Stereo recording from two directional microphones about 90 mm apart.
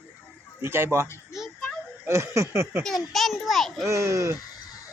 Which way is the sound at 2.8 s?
5° left (ahead or behind).